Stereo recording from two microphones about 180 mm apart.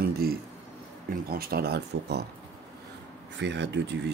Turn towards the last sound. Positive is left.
turn(degrees=-75)  # may be behind; listen again after turning